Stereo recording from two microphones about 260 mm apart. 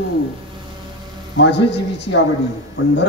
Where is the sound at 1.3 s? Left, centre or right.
Left.